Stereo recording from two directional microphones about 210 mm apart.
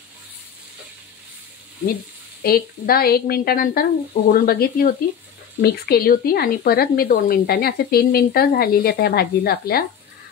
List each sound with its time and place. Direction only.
2.4 s speech: 45° left (ahead or behind)